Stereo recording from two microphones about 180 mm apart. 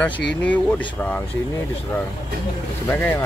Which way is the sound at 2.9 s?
10° left (ahead or behind).